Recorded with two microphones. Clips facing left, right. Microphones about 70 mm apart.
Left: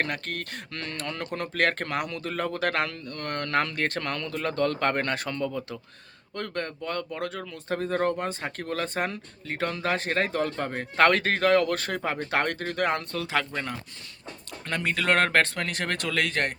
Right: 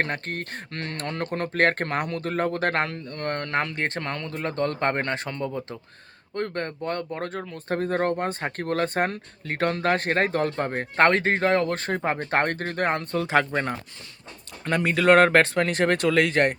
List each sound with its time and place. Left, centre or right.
0.0 s speech: right
14.7 s speech: centre
15.5 s speech: right